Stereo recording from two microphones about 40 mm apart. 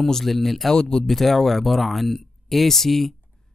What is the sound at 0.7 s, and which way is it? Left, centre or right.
Speech, left.